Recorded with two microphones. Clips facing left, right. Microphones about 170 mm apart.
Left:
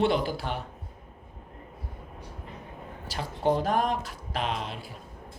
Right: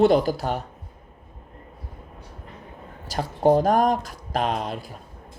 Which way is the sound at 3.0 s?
40° right (ahead or behind).